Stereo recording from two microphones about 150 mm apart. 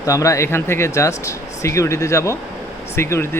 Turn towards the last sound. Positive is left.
turn(degrees=15)  # may be behind; listen again after turning